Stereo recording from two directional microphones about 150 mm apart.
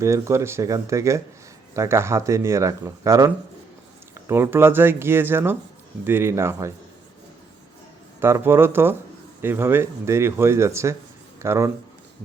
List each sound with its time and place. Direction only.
0.0 s speech: 20° right (ahead or behind)
8.2 s speech: 15° right (ahead or behind)